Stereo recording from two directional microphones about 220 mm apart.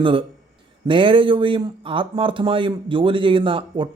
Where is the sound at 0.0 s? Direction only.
25° right (ahead or behind).